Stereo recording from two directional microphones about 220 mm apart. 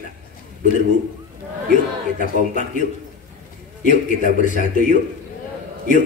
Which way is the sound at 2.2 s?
35° left (ahead or behind).